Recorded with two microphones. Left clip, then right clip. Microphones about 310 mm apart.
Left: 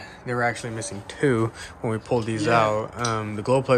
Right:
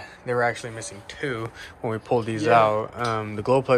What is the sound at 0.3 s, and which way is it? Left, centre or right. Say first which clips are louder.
Speech: right 1 dB; centre.